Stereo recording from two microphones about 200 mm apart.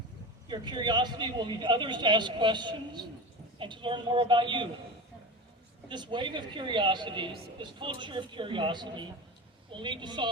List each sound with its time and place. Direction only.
0.4 s a man's voice: 20° right (ahead or behind)
5.9 s a man's voice: 25° right (ahead or behind)